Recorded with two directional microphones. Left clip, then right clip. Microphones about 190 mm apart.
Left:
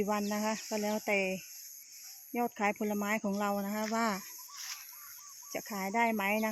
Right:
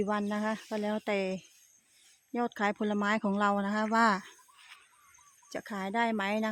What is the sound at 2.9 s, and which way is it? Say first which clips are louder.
Speech: right 4 dB; 40° right (ahead or behind).